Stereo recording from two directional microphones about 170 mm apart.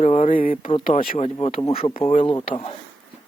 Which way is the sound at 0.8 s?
55° left (ahead or behind).